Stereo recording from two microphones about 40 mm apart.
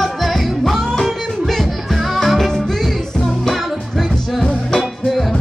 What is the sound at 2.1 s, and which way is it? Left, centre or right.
Music, centre.